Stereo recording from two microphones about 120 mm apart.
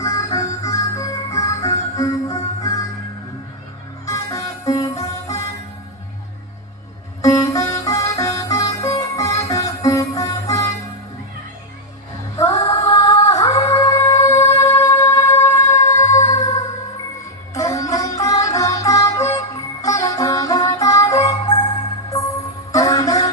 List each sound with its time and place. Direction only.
0.0 s music: 30° left (ahead or behind)
4.0 s music: 25° left (ahead or behind)
7.2 s music: 30° left (ahead or behind)
12.4 s music: 25° left (ahead or behind)
17.5 s music: 25° left (ahead or behind)
22.7 s music: 30° left (ahead or behind)